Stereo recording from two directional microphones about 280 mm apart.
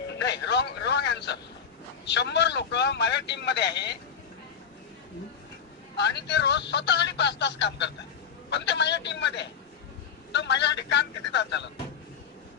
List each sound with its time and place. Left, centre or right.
0.2 s a sound: left
2.0 s a man's voice: left
6.0 s speech: left